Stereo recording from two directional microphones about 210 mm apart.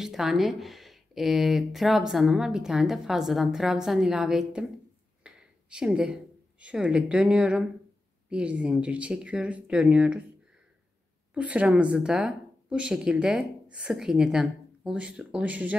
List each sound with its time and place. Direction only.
0.0 s speech: centre (ahead or behind)
5.2 s a sound: 5° right (ahead or behind)
6.6 s speech: 5° right (ahead or behind)
11.3 s speech: 5° right (ahead or behind)